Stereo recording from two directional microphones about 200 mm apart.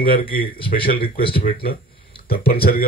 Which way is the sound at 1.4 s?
50° left (ahead or behind).